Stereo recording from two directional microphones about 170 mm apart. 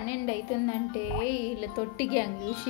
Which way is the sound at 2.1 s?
20° left (ahead or behind).